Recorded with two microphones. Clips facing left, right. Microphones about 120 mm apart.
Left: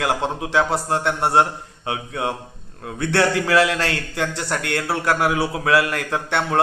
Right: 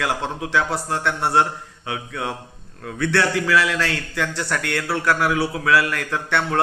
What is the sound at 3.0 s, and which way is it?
Speech, 45° left (ahead or behind).